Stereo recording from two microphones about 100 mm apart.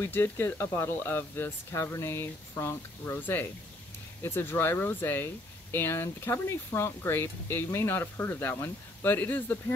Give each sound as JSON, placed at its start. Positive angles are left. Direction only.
{"t": 0.0, "sound": "speech", "side_deg": 25}